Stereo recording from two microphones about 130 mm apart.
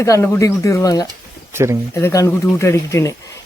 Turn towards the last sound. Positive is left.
turn(degrees=20)  # may be behind; listen again after turning